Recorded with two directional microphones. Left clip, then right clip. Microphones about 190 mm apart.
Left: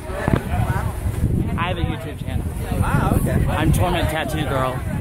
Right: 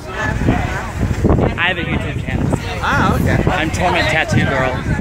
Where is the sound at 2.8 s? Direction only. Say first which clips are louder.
Right 8 dB; 40° right (ahead or behind).